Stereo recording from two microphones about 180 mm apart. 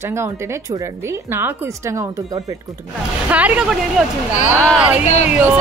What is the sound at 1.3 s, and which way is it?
Speech, 15° right (ahead or behind).